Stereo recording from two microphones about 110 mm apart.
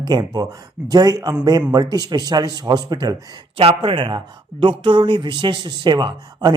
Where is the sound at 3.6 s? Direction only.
60° right (ahead or behind).